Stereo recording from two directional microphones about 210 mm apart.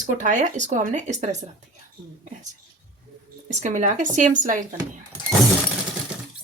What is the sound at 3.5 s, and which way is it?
Speech, 35° right (ahead or behind).